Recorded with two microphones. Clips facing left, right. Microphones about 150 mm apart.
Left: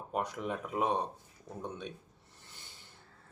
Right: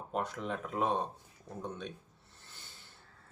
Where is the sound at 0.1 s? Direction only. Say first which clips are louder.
Left 1 dB; 10° left (ahead or behind).